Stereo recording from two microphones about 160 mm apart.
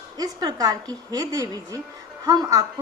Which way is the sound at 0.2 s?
25° right (ahead or behind).